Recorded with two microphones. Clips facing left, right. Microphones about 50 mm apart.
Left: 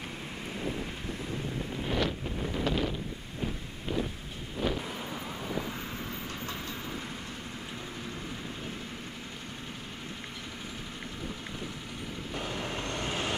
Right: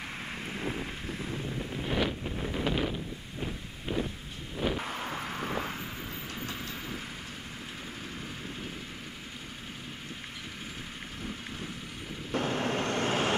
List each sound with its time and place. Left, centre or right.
0.4 s wind: centre
4.6 s vehicle: centre
5.8 s vehicle: centre
12.4 s vehicle: right